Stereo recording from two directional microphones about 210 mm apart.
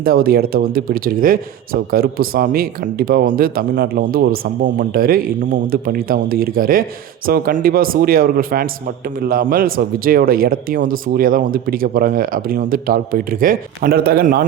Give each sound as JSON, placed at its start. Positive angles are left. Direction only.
{"t": 0.0, "sound": "speech", "side_deg": -45}